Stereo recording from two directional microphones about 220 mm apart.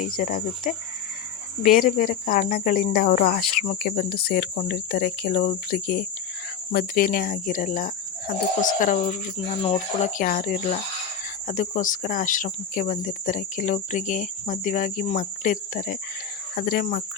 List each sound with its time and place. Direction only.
0.0 s speech: 40° left (ahead or behind)